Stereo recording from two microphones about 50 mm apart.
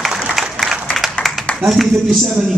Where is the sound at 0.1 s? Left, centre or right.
Centre.